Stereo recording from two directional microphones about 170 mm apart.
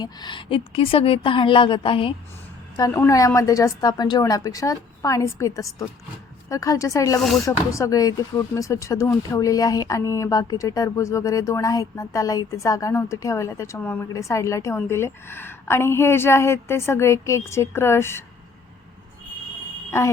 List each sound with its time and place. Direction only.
0.0 s a woman's voice: 25° left (ahead or behind)
7.2 s speech: centre (ahead or behind)
7.4 s a woman's voice: 20° left (ahead or behind)